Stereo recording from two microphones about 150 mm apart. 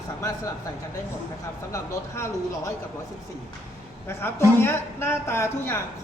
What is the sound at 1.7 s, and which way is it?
Speech, 20° left (ahead or behind).